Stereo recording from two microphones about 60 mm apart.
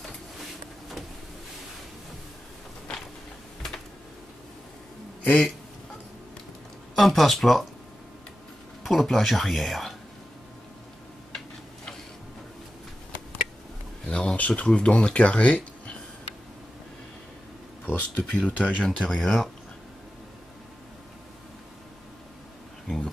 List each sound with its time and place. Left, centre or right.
7.0 s speech: centre
8.8 s speech: centre
11.3 s tick-tock: centre
14.0 s speech: centre
17.8 s speech: left
19.0 s speech: centre
22.8 s speech: centre